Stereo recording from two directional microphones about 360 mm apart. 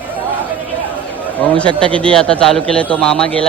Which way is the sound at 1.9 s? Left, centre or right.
Centre.